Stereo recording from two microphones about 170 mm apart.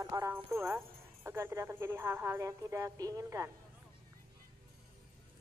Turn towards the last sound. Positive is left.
turn(degrees=-20)  # may be behind; listen again after turning